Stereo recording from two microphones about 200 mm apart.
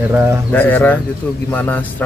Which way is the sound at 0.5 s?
10° left (ahead or behind).